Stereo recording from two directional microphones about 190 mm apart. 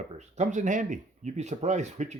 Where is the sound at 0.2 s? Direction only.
40° right (ahead or behind).